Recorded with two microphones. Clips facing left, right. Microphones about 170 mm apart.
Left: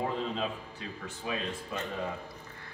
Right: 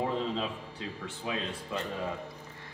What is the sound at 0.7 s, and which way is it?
Speech, 25° right (ahead or behind).